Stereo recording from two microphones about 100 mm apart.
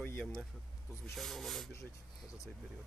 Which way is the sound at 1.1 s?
Centre (ahead or behind).